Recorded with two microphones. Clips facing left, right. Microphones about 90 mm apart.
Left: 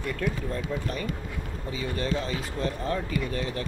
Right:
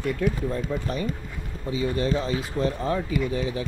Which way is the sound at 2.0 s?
35° right (ahead or behind).